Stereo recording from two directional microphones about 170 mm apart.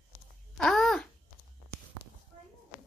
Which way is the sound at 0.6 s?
Centre (ahead or behind).